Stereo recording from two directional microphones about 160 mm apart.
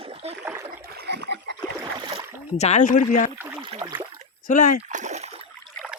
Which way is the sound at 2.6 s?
45° left (ahead or behind).